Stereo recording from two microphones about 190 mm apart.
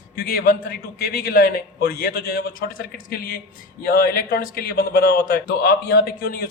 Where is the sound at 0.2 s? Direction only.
55° left (ahead or behind).